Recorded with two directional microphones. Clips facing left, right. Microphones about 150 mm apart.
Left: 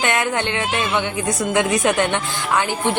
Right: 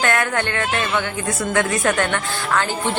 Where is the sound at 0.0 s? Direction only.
15° left (ahead or behind).